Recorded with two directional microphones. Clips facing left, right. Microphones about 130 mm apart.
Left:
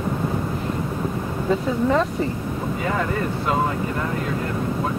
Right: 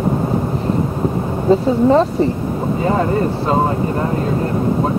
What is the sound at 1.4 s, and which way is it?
Speech, 30° right (ahead or behind).